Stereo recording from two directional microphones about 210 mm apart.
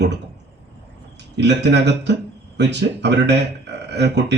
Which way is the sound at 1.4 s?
55° right (ahead or behind).